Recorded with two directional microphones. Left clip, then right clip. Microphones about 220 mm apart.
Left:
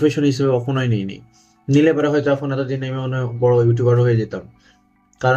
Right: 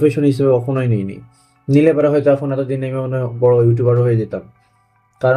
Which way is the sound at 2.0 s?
55° right (ahead or behind).